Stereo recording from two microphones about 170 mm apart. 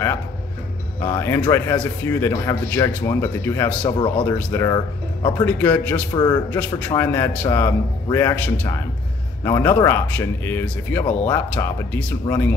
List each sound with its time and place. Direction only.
1.0 s speech: 15° left (ahead or behind)
5.6 s speech: 10° left (ahead or behind)
6.1 s a man's voice: 25° left (ahead or behind)
6.5 s speech: 15° left (ahead or behind)